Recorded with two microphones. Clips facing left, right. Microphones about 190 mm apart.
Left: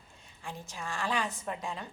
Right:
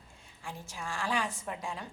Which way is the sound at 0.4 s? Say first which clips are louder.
Left 1 dB; 10° right (ahead or behind).